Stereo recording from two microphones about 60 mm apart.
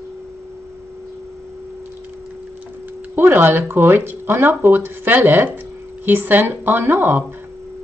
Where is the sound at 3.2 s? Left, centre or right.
Right.